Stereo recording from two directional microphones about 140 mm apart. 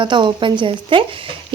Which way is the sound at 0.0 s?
35° right (ahead or behind).